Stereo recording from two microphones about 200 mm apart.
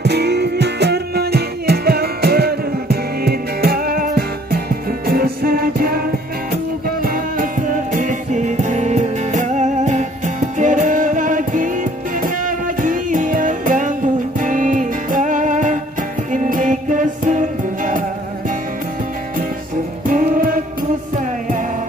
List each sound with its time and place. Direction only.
0.0 s music: 55° right (ahead or behind); by 18.0 s 40° right (ahead or behind)
20.1 s music: 45° right (ahead or behind)